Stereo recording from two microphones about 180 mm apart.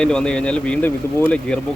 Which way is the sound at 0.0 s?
5° left (ahead or behind).